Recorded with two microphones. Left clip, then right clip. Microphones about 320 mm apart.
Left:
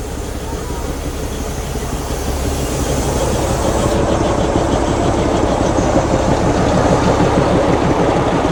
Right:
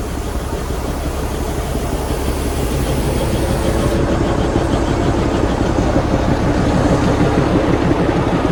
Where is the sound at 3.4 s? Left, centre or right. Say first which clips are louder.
Left 2 dB; centre.